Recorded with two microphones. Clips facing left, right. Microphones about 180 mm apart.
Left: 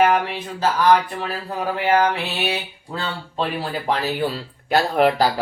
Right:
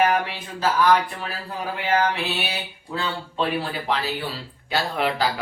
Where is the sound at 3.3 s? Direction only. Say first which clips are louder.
Left 1 dB; 35° left (ahead or behind).